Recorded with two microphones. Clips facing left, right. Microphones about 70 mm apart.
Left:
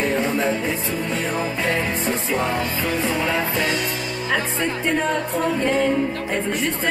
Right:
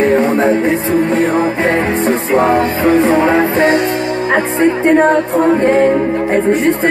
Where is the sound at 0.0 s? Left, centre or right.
Right.